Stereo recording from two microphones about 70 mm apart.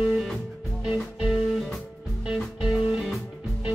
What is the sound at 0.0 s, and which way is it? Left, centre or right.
Music, centre.